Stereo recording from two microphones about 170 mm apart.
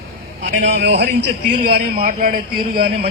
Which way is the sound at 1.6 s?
60° right (ahead or behind).